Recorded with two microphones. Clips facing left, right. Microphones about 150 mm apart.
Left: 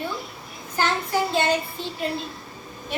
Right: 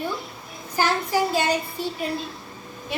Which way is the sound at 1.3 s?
10° right (ahead or behind).